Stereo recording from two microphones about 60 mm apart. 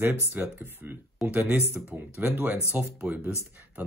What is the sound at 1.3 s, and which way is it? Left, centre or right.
Speech, right.